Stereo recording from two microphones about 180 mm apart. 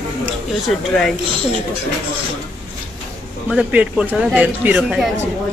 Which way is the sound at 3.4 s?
5° right (ahead or behind).